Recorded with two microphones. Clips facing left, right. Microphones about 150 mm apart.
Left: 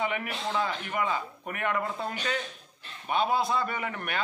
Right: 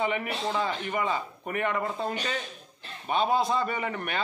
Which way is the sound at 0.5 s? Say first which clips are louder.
Even; 15° right (ahead or behind).